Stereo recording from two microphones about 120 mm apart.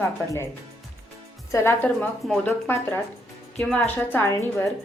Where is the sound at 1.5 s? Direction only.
20° left (ahead or behind).